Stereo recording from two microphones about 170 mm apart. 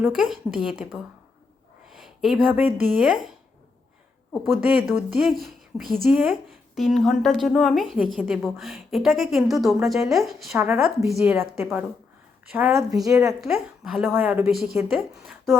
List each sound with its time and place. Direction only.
0.1 s a woman's voice: 5° right (ahead or behind)
4.5 s a woman's voice: 15° right (ahead or behind)
5.1 s a woman's voice: centre (ahead or behind); by 13.3 s 20° right (ahead or behind)
13.4 s a woman's voice: centre (ahead or behind)